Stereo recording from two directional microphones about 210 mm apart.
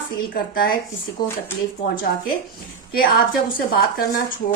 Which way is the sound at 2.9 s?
45° left (ahead or behind).